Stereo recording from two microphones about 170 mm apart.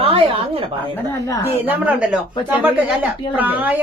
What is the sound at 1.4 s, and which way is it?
Speech, 10° right (ahead or behind).